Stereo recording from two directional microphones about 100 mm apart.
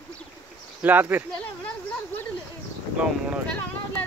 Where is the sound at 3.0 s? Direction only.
10° right (ahead or behind).